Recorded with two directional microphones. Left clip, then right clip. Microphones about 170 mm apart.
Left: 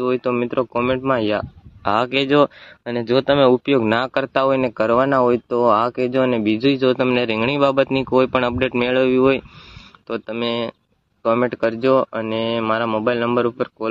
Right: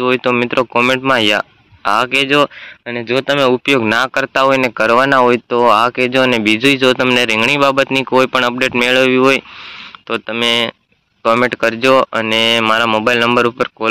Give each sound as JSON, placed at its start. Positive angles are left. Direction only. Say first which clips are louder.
{"t": 0.0, "sound": "speech", "louder": "right 6 dB", "side_deg": -5}
{"t": 1.9, "sound": "speech", "louder": "right 5 dB", "side_deg": 10}
{"t": 3.6, "sound": "speech", "louder": "right 5 dB", "side_deg": 10}